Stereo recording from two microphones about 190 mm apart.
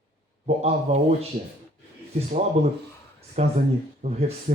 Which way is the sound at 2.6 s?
30° right (ahead or behind).